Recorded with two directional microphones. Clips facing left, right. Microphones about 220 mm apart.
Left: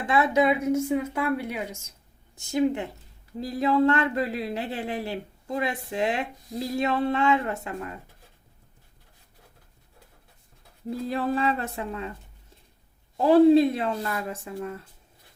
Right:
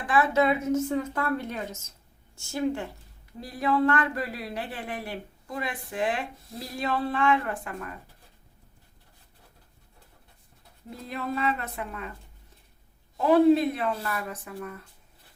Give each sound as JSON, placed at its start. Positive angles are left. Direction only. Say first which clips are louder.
{"t": 0.0, "sound": "a woman's voice", "louder": "left 2 dB", "side_deg": 20}
{"t": 11.1, "sound": "speech", "louder": "left 3 dB", "side_deg": 30}
{"t": 13.1, "sound": "speech", "louder": "left 3 dB", "side_deg": 30}